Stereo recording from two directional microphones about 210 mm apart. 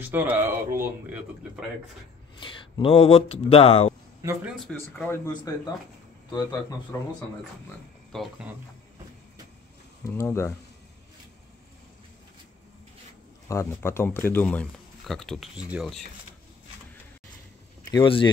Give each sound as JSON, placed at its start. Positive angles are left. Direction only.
{"t": 0.0, "sound": "speech", "side_deg": -10}
{"t": 2.3, "sound": "speech", "side_deg": 25}
{"t": 4.2, "sound": "speech", "side_deg": -15}
{"t": 4.6, "sound": "speech", "side_deg": 5}
{"t": 8.1, "sound": "speech", "side_deg": -5}
{"t": 10.0, "sound": "speech", "side_deg": 15}
{"t": 13.5, "sound": "speech", "side_deg": 15}
{"t": 17.9, "sound": "speech", "side_deg": 25}